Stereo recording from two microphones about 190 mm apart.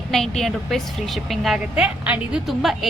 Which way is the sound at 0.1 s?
Centre (ahead or behind).